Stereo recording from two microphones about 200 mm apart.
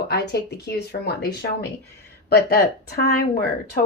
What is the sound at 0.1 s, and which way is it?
Speech, 55° left (ahead or behind).